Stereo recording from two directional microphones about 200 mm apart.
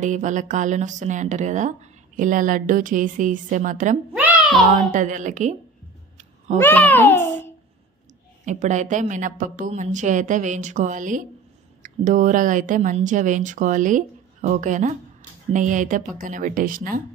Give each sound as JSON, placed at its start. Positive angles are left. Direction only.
{"t": 0.0, "sound": "speech", "side_deg": -40}
{"t": 4.1, "sound": "a sound", "side_deg": 0}
{"t": 4.6, "sound": "speech", "side_deg": -35}
{"t": 6.1, "sound": "cat", "side_deg": -35}
{"t": 6.6, "sound": "a child's voice", "side_deg": 10}
{"t": 8.5, "sound": "speech", "side_deg": -35}